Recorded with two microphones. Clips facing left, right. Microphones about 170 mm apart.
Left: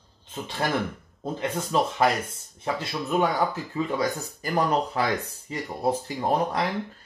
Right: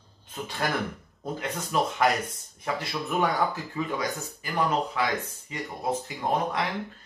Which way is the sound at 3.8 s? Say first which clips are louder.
Left 4 dB; 35° left (ahead or behind).